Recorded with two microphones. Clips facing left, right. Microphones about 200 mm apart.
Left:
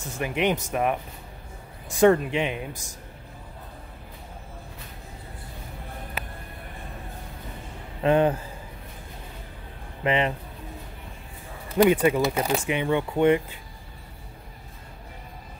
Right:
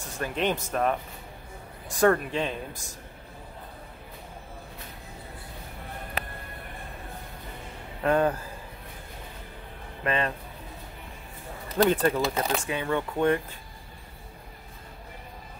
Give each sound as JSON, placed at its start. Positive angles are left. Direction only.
{"t": 0.2, "sound": "speech", "side_deg": 15}
{"t": 2.0, "sound": "speech", "side_deg": 20}
{"t": 8.0, "sound": "speech", "side_deg": 20}
{"t": 10.0, "sound": "speech", "side_deg": 20}
{"t": 11.7, "sound": "speech", "side_deg": 10}